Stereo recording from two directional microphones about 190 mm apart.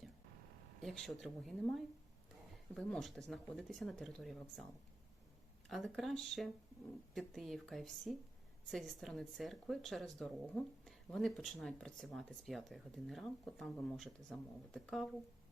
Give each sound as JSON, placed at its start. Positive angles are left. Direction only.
{"t": 0.8, "sound": "speech", "side_deg": 0}
{"t": 5.6, "sound": "speech", "side_deg": 0}